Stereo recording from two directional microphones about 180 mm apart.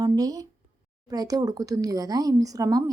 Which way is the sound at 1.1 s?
20° right (ahead or behind).